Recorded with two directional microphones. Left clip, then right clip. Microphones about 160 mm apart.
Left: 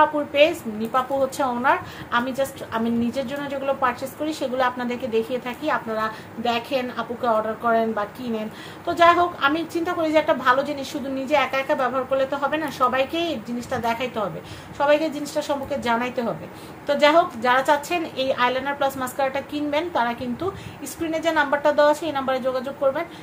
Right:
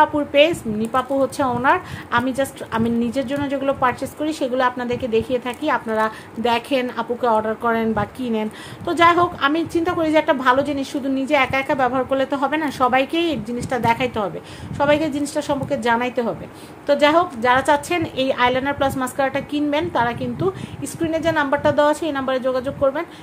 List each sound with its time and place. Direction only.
0.0 s a woman's voice: 35° right (ahead or behind)